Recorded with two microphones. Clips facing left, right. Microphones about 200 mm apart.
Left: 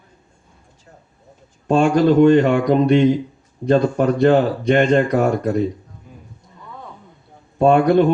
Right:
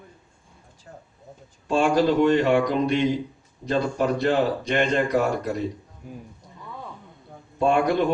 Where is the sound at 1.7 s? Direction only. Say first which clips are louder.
Left 6 dB; 50° left (ahead or behind).